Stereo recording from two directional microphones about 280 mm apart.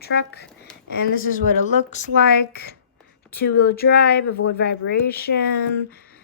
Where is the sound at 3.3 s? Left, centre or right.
Left.